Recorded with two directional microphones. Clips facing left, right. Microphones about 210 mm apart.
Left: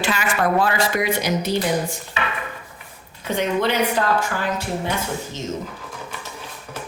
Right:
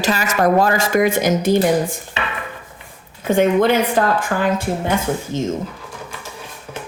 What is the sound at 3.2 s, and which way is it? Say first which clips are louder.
A woman's voice: right 7 dB; 50° right (ahead or behind).